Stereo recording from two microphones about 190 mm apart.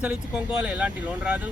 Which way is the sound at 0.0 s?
5° right (ahead or behind).